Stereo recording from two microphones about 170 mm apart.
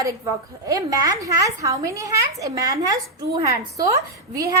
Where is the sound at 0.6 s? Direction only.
20° right (ahead or behind).